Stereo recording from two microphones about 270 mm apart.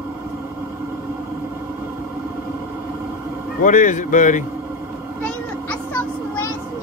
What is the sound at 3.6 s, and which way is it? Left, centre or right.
Speech, left.